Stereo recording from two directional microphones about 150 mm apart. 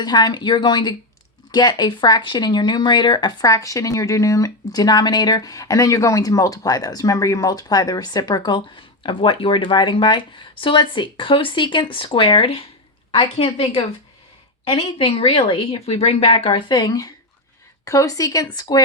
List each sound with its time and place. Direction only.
0.0 s a woman's voice: 30° left (ahead or behind); by 13.7 s 45° left (ahead or behind)
14.7 s speech: 35° left (ahead or behind)